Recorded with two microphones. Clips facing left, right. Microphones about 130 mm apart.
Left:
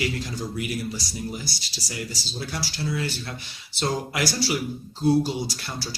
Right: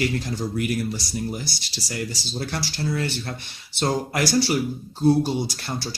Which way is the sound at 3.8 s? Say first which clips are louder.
Right 3 dB; 55° right (ahead or behind).